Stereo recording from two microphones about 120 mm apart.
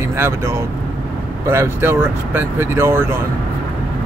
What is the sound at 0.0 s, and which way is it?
Speech, 20° right (ahead or behind).